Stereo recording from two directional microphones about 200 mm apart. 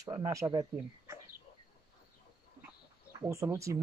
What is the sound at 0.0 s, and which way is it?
Speech, 15° right (ahead or behind).